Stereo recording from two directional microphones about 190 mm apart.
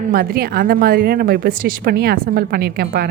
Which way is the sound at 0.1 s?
50° right (ahead or behind).